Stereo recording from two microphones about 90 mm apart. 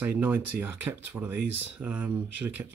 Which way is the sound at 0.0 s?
20° right (ahead or behind).